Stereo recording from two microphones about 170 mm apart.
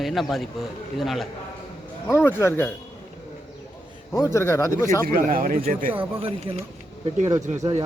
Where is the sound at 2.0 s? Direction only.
15° left (ahead or behind).